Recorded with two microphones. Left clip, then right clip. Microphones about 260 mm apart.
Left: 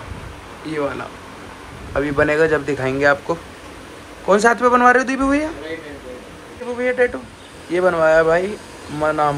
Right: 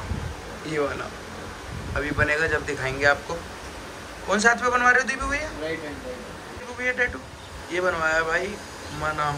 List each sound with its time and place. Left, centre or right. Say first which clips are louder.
0.7 s a man's voice: left 4 dB; centre
6.8 s a man's voice: left 7 dB; centre